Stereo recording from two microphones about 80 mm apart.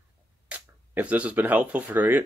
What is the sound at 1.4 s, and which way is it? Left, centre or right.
Speech, right.